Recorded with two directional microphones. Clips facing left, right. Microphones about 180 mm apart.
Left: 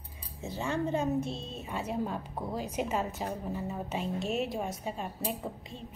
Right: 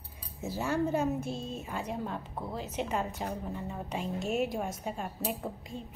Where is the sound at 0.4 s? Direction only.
5° right (ahead or behind).